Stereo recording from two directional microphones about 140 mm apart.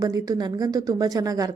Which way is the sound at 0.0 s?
25° right (ahead or behind).